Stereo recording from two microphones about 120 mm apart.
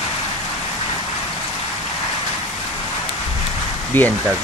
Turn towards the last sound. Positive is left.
turn(degrees=15)  # may be behind; listen again after turning